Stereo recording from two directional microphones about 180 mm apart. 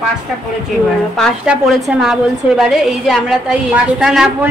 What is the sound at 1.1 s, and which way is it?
A woman's voice, 5° left (ahead or behind).